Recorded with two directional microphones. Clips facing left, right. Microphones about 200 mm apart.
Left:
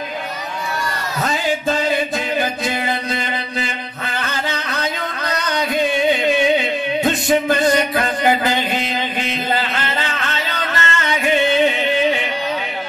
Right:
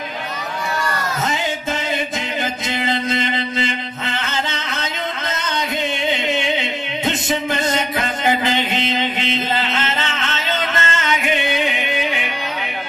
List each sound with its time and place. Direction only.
1.2 s music: 20° right (ahead or behind)